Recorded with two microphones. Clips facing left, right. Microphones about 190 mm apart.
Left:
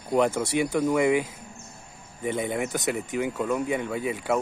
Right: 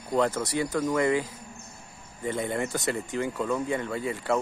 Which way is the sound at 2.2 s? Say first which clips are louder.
Left 2 dB; 10° left (ahead or behind).